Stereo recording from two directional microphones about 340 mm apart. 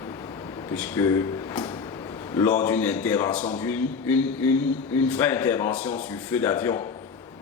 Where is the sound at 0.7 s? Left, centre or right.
Centre.